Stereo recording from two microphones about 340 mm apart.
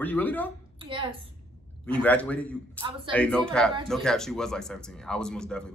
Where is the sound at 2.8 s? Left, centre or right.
Centre.